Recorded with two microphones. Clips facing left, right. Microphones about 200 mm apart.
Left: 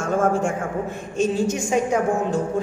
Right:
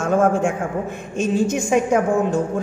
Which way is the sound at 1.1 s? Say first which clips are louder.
Right 2 dB; 55° right (ahead or behind).